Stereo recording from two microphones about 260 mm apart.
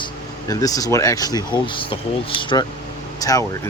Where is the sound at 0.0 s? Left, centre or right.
Centre.